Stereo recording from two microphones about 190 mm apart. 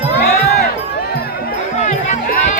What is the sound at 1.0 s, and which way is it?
Music, 55° left (ahead or behind).